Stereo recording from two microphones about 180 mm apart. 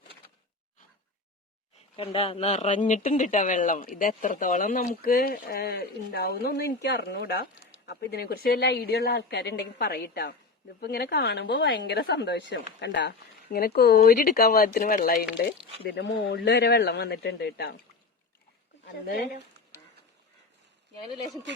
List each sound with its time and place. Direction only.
2.0 s speech: 30° left (ahead or behind)
5.1 s speech: 60° left (ahead or behind)
15.8 s speech: 65° left (ahead or behind)
18.9 s speech: 55° left (ahead or behind)